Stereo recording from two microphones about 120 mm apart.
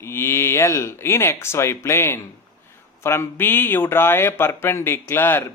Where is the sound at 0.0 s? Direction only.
20° left (ahead or behind).